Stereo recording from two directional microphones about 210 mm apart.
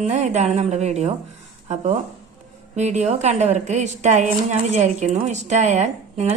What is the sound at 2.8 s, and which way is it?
A woman's voice, 35° right (ahead or behind).